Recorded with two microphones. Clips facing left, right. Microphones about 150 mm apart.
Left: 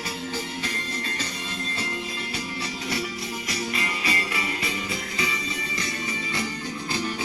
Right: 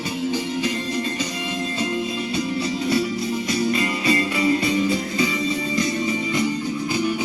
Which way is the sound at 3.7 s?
30° right (ahead or behind).